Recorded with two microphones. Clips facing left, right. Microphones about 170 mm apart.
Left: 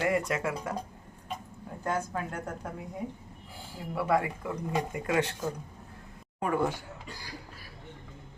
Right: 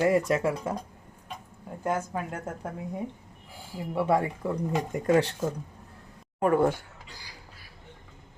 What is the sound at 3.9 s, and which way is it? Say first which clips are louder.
Speech: right 3 dB; 30° right (ahead or behind).